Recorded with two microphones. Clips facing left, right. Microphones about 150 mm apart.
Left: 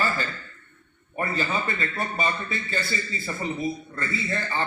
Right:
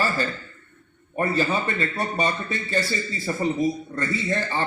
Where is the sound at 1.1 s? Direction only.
35° right (ahead or behind).